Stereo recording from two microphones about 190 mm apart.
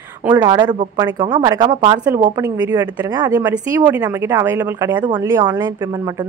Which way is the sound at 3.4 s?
10° right (ahead or behind).